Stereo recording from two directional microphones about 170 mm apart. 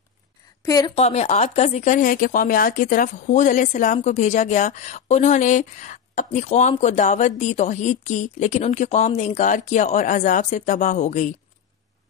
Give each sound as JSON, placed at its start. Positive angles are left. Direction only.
{"t": 0.7, "sound": "a woman's voice", "side_deg": 20}
{"t": 0.9, "sound": "speech", "side_deg": 40}